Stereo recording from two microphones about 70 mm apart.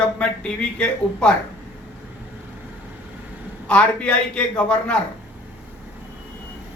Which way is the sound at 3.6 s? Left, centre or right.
Centre.